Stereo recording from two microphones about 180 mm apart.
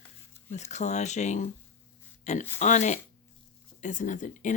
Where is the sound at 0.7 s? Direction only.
40° left (ahead or behind).